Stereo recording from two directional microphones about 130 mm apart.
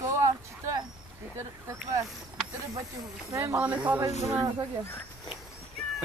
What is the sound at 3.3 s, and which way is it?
Speech, 20° right (ahead or behind).